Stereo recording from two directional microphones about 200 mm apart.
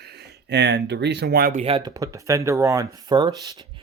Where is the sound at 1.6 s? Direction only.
25° right (ahead or behind).